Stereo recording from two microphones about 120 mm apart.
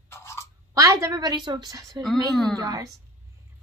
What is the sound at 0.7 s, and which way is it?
Speech, 25° right (ahead or behind).